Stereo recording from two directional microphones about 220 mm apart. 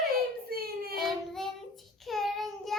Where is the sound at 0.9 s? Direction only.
Centre (ahead or behind).